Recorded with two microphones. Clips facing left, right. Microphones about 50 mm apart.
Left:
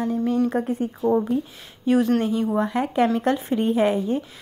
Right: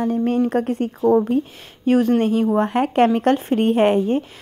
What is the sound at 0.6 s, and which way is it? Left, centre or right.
Speech, right.